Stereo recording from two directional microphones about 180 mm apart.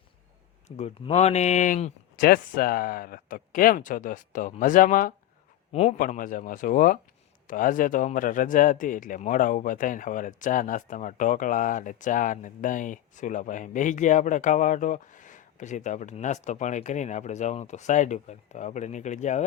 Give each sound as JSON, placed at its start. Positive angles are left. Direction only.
{"t": 0.8, "sound": "speech", "side_deg": 35}